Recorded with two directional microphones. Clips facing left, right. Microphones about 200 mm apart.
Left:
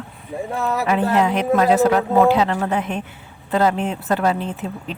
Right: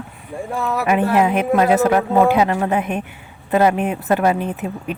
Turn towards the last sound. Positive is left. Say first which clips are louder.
# right 3 dB
turn(degrees=-15)  # may be behind; listen again after turning